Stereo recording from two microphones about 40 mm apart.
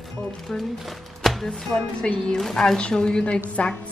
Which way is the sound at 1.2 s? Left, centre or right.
Centre.